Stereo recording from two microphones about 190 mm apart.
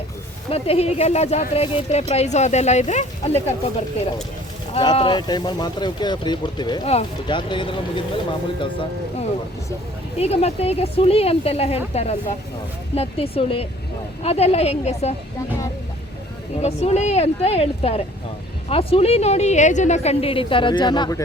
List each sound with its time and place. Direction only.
0.5 s speech: 30° left (ahead or behind)
16.6 s speech: 35° left (ahead or behind)